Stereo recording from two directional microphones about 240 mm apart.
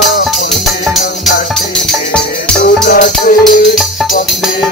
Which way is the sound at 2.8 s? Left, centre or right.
Left.